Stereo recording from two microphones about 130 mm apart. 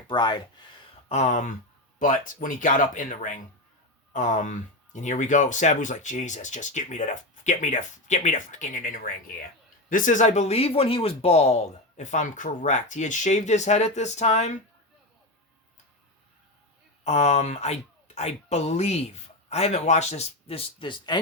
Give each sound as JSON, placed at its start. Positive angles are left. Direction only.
{"t": 0.1, "sound": "speech", "side_deg": 35}
{"t": 1.0, "sound": "speech", "side_deg": 60}
{"t": 2.0, "sound": "speech", "side_deg": 90}
{"t": 17.0, "sound": "speech", "side_deg": 55}